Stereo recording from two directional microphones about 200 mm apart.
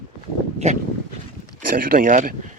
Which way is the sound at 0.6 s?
35° right (ahead or behind).